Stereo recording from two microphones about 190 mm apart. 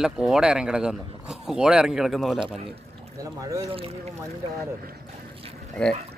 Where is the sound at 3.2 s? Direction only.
15° right (ahead or behind).